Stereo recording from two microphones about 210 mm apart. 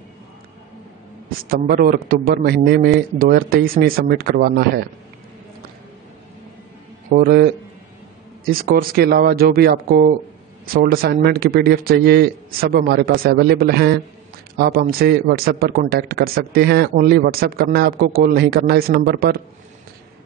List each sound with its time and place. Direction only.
1.5 s a man's voice: 45° right (ahead or behind)
7.1 s a man's voice: 45° right (ahead or behind)